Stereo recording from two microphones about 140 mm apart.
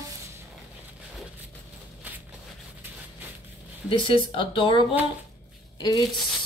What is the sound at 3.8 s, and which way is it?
Speech, 40° left (ahead or behind).